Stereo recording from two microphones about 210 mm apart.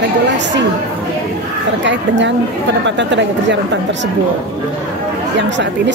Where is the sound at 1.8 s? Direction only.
60° right (ahead or behind).